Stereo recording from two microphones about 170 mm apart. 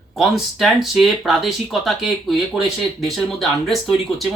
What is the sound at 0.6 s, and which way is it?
Speech, centre (ahead or behind).